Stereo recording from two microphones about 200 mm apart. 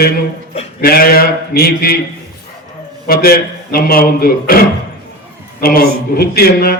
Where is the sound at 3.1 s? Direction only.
50° left (ahead or behind).